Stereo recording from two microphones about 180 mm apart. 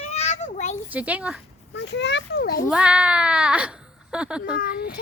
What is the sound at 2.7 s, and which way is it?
A woman's voice, 5° right (ahead or behind).